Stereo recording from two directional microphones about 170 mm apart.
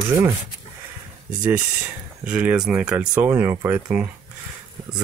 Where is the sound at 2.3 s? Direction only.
5° right (ahead or behind).